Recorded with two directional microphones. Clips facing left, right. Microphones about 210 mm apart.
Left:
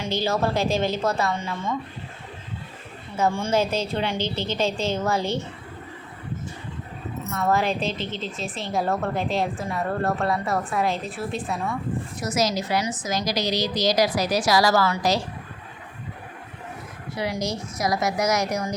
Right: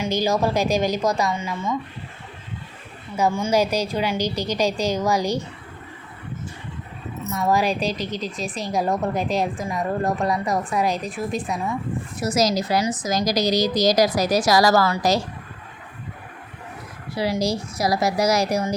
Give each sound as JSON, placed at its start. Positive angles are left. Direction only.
{"t": 0.0, "sound": "a woman's voice", "side_deg": -15}
{"t": 3.2, "sound": "a woman's voice", "side_deg": -5}
{"t": 7.3, "sound": "a woman's voice", "side_deg": -15}
{"t": 7.9, "sound": "a woman's voice", "side_deg": -40}
{"t": 8.4, "sound": "a woman's voice", "side_deg": -15}
{"t": 12.2, "sound": "a woman's voice", "side_deg": -35}
{"t": 17.2, "sound": "a woman's voice", "side_deg": -35}